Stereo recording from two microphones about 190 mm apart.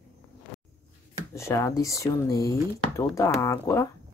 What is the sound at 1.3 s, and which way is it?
Speech, 15° left (ahead or behind).